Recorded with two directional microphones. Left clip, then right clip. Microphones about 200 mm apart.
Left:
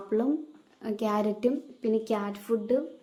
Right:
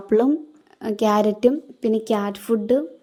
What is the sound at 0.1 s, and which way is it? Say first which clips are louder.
A woman's voice: right 10 dB; 45° right (ahead or behind).